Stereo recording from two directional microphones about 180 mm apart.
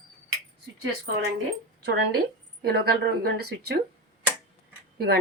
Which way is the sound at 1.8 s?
60° right (ahead or behind).